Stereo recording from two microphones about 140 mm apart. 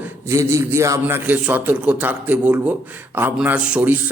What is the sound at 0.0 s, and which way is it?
A man's voice, 20° right (ahead or behind).